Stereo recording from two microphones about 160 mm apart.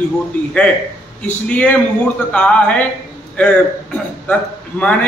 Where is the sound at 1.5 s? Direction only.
10° left (ahead or behind).